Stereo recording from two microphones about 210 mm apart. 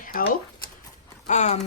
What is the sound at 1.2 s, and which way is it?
Speech, 35° left (ahead or behind).